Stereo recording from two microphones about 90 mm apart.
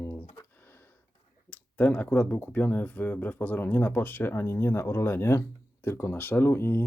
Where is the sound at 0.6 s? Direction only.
25° left (ahead or behind).